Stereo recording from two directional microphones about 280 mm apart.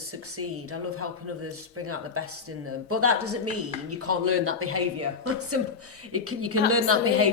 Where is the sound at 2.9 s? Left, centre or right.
Right.